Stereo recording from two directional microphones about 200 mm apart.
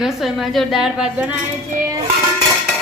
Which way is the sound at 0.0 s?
Centre (ahead or behind).